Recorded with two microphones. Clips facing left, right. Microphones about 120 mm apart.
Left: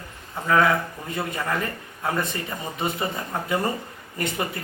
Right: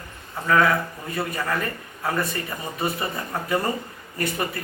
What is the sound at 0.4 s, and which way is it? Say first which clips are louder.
A man's voice: even; 15° left (ahead or behind).